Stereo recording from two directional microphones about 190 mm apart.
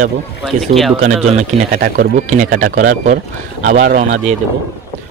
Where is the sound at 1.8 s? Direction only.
45° right (ahead or behind).